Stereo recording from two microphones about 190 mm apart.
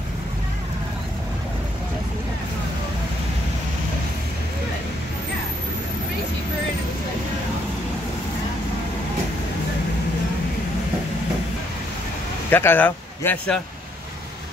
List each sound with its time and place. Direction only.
12.4 s speech: 10° left (ahead or behind)